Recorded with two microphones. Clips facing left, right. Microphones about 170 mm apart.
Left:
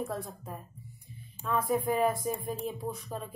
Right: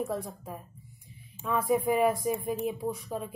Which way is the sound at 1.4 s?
Centre (ahead or behind).